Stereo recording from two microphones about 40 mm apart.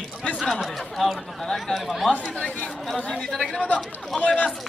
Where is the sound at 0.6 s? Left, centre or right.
Centre.